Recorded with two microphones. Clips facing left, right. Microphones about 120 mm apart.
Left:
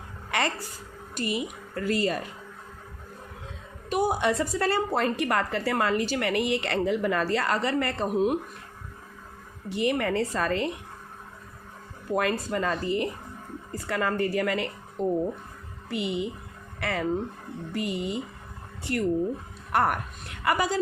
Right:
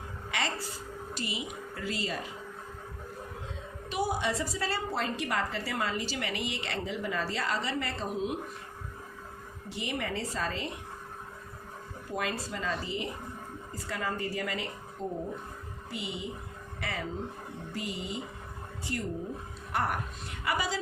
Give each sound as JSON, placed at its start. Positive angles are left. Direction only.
{"t": 0.3, "sound": "a sound", "side_deg": 55}
{"t": 1.1, "sound": "speech", "side_deg": 55}
{"t": 3.8, "sound": "a woman's voice", "side_deg": 50}
{"t": 9.6, "sound": "a woman's voice", "side_deg": 60}
{"t": 12.1, "sound": "a woman's voice", "side_deg": 55}